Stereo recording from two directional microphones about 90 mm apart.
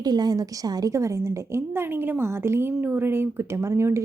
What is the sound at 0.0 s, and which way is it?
A woman's voice, 50° right (ahead or behind).